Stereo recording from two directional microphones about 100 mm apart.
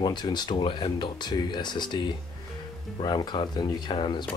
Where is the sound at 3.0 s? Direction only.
45° left (ahead or behind).